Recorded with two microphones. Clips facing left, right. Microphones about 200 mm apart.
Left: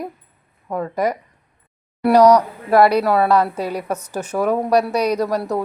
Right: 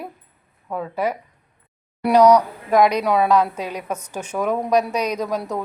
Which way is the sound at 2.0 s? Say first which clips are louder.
Left 2 dB; 10° left (ahead or behind).